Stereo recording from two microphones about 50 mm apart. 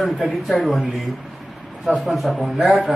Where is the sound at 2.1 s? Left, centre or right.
Centre.